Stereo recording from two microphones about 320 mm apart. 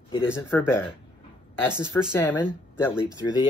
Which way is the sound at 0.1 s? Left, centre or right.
Centre.